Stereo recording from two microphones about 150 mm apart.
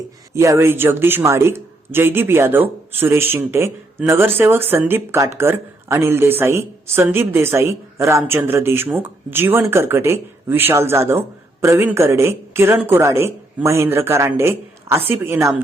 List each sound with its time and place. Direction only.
0.3 s speech: 20° right (ahead or behind)